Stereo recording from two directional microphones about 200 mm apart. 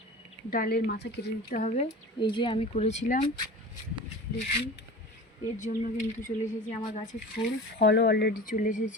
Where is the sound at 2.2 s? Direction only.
25° left (ahead or behind); by 3.3 s 40° left (ahead or behind).